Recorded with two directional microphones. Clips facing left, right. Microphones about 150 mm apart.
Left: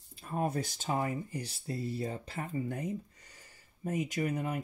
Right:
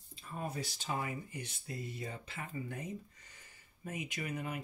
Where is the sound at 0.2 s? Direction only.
55° left (ahead or behind).